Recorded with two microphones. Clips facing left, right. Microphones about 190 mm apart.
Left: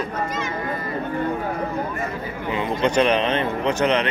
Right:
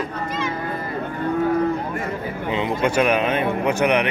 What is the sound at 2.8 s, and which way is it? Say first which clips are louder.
A man's voice: left 1 dB; 10° right (ahead or behind).